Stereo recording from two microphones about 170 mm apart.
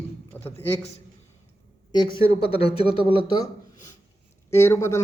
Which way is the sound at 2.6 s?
35° left (ahead or behind).